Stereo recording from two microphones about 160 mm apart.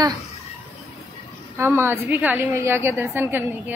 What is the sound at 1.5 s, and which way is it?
A woman's voice, 15° right (ahead or behind).